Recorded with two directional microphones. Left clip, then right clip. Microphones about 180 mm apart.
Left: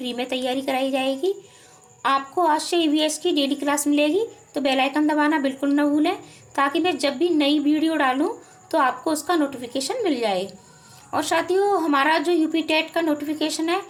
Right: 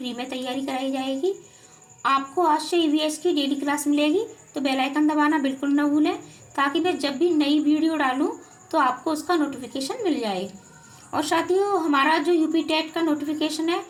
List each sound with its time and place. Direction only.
0.0 s a woman's voice: 15° left (ahead or behind)